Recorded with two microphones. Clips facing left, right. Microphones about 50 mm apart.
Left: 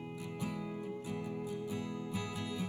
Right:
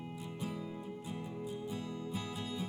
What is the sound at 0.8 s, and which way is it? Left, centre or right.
Music, left.